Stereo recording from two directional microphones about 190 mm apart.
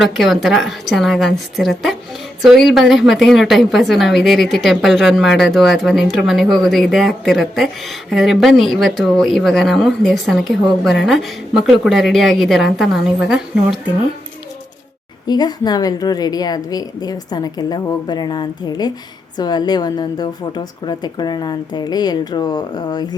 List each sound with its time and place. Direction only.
0.0 s speech: centre (ahead or behind)
15.3 s a woman's voice: 20° left (ahead or behind)